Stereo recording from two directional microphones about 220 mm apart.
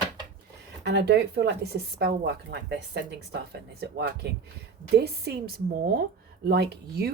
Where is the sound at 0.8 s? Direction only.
50° right (ahead or behind).